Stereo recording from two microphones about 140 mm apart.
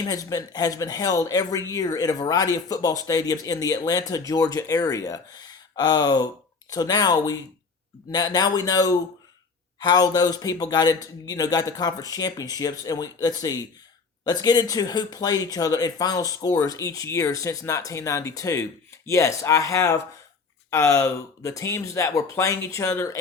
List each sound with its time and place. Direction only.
0.0 s speech: 25° left (ahead or behind)